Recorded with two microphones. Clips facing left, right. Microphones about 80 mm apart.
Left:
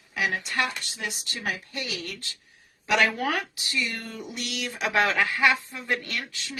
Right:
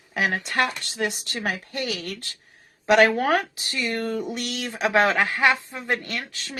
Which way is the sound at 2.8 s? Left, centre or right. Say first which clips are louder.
Right 6 dB; right.